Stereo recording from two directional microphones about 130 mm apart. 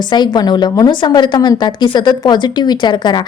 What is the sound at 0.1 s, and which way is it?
A woman's voice, 35° left (ahead or behind).